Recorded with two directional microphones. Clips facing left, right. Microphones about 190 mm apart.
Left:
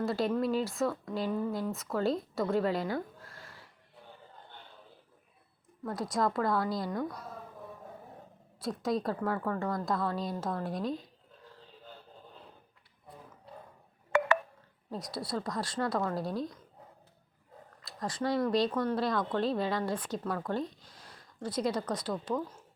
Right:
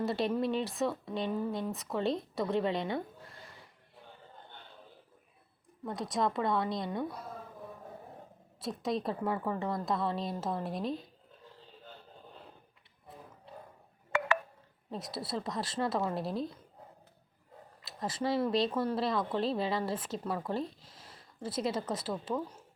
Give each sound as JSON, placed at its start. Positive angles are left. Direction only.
{"t": 0.0, "sound": "speech", "side_deg": 0}
{"t": 2.9, "sound": "a sound", "side_deg": 0}
{"t": 5.9, "sound": "speech", "side_deg": 0}
{"t": 8.6, "sound": "speech", "side_deg": 0}
{"t": 14.8, "sound": "speech", "side_deg": 0}
{"t": 16.3, "sound": "speech", "side_deg": -30}
{"t": 17.8, "sound": "speech", "side_deg": -5}